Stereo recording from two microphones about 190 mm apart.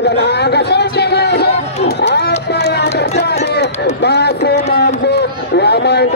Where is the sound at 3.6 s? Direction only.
60° left (ahead or behind).